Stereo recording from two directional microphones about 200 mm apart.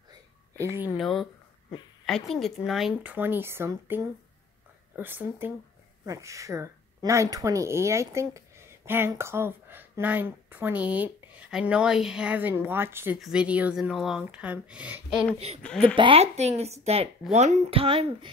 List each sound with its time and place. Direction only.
0.1 s a sound: 15° right (ahead or behind)
0.9 s speech: centre (ahead or behind)
15.3 s a woman's voice: 30° right (ahead or behind)
15.6 s speech: 5° left (ahead or behind)
16.0 s a woman's voice: 30° right (ahead or behind)